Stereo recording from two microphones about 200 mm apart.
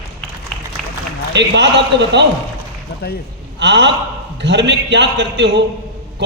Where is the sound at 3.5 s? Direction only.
60° right (ahead or behind).